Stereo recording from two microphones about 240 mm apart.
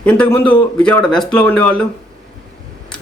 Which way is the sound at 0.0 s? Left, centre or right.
Centre.